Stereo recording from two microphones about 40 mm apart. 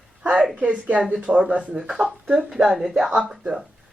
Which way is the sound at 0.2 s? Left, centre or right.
Right.